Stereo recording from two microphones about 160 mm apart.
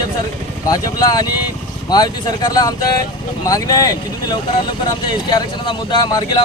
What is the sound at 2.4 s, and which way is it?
Speech, 25° left (ahead or behind).